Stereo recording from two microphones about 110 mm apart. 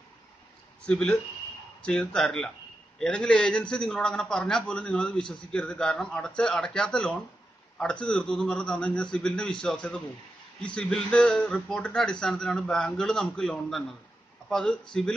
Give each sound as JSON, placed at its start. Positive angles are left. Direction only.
{"t": 0.8, "sound": "a man's voice", "side_deg": 5}